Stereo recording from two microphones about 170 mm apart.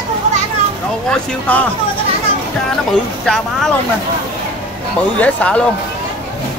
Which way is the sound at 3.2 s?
Centre (ahead or behind).